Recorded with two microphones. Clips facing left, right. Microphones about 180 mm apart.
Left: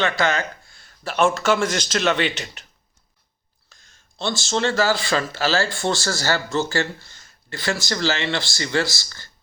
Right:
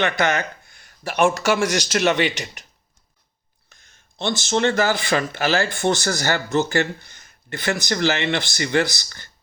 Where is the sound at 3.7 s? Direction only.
20° right (ahead or behind).